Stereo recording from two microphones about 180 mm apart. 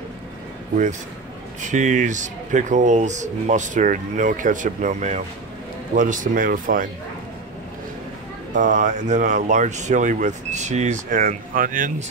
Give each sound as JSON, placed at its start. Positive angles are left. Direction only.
{"t": 1.6, "sound": "speech", "side_deg": -40}
{"t": 8.5, "sound": "speech", "side_deg": -45}